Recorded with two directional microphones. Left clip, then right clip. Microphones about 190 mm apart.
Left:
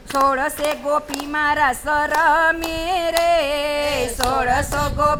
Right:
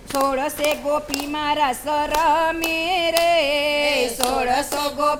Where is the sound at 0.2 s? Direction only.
20° left (ahead or behind).